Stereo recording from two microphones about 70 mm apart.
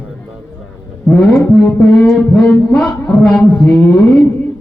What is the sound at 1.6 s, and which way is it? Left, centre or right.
Speech, centre.